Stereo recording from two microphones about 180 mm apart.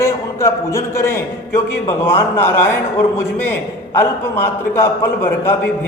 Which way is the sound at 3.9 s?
15° left (ahead or behind).